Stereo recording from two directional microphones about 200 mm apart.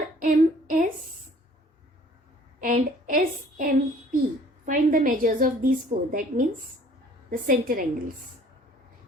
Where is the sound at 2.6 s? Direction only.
40° right (ahead or behind).